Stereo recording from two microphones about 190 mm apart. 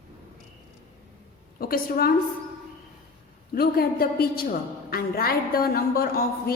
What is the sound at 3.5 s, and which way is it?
A woman's voice, 55° left (ahead or behind).